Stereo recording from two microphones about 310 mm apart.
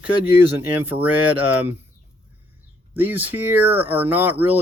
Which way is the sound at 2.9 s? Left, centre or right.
Centre.